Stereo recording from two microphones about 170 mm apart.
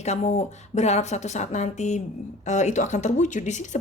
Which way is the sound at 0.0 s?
40° left (ahead or behind).